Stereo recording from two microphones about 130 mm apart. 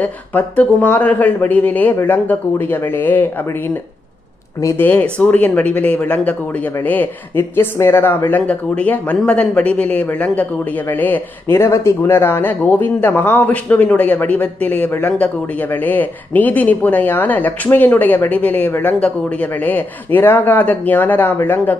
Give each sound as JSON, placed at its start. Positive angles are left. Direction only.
{"t": 0.0, "sound": "speech", "side_deg": 15}
{"t": 4.6, "sound": "speech", "side_deg": 25}
{"t": 4.8, "sound": "speech", "side_deg": 10}